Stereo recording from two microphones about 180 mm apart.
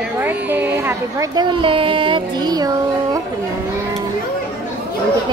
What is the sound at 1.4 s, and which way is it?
Child singing, 25° right (ahead or behind).